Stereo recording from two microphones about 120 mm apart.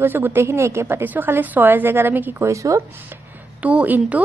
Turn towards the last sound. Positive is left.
turn(degrees=-10)  # may be behind; listen again after turning